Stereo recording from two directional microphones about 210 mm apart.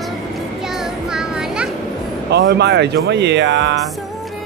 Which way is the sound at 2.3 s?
55° right (ahead or behind).